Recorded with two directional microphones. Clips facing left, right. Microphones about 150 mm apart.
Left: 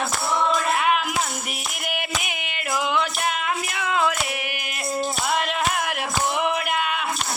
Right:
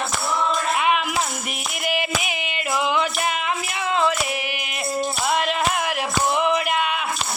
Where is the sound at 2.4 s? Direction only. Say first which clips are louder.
Right 1 dB; centre (ahead or behind).